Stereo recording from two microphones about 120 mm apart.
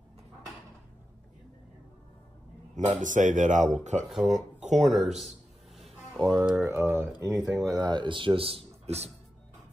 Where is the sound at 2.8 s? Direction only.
90° right.